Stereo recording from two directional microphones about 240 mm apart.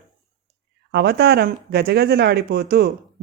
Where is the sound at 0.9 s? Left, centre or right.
Right.